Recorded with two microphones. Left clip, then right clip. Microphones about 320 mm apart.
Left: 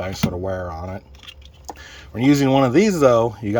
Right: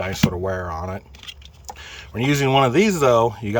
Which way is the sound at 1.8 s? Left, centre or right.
Centre.